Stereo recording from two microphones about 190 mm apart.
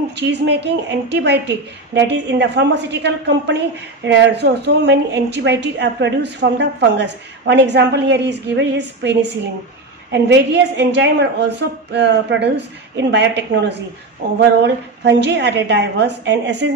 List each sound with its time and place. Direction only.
0.1 s a woman's voice: 65° right (ahead or behind)